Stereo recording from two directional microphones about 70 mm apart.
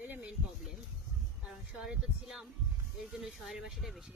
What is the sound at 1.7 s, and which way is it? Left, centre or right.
Speech, centre.